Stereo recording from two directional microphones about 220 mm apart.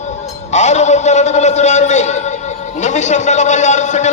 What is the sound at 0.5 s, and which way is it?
A man's voice, 30° left (ahead or behind).